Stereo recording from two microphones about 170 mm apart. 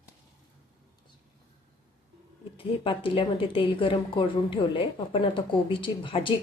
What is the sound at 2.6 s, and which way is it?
A woman's voice, 30° left (ahead or behind).